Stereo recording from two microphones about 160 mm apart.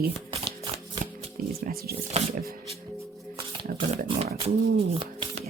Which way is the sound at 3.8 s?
35° right (ahead or behind).